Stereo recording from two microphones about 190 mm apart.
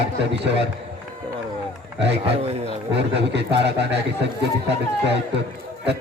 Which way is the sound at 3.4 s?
65° right (ahead or behind).